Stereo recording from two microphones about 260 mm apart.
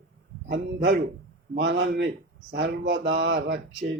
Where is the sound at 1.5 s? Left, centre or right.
Right.